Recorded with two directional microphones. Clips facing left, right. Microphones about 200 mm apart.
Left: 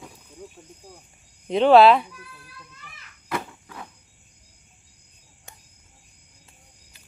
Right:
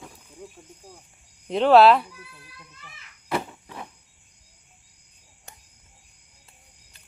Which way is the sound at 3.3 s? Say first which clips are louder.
Right 2 dB; 25° right (ahead or behind).